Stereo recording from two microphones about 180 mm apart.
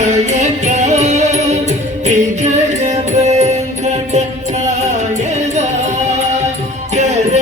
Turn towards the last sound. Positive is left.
turn(degrees=-40)  # may be behind; listen again after turning